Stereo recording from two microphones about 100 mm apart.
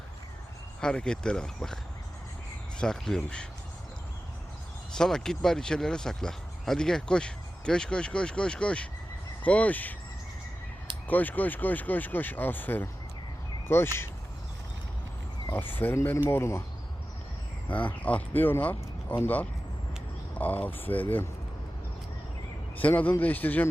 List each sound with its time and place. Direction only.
0.8 s speech: 10° left (ahead or behind)
4.9 s speech: 5° left (ahead or behind)
11.1 s speech: 15° left (ahead or behind)
15.5 s speech: 20° left (ahead or behind)
17.7 s speech: 15° left (ahead or behind)
22.8 s speech: 15° left (ahead or behind)